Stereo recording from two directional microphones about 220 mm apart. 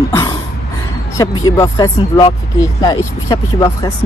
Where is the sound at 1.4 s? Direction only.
15° left (ahead or behind).